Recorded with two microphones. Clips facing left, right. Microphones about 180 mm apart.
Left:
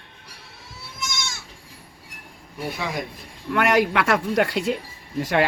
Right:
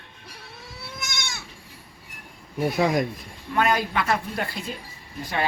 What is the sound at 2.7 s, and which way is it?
Speech, 40° right (ahead or behind).